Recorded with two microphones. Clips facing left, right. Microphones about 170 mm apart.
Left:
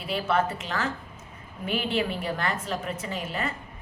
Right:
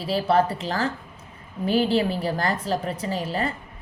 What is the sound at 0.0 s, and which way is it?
A woman's voice, 35° right (ahead or behind).